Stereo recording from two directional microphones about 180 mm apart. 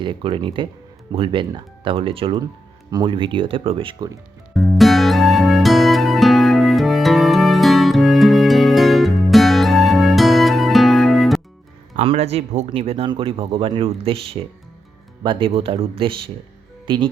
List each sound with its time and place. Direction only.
0.0 s speech: 25° right (ahead or behind)
4.5 s music: centre (ahead or behind)
11.9 s speech: 35° right (ahead or behind)